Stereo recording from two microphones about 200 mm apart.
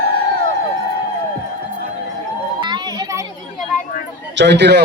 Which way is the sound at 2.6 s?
20° right (ahead or behind).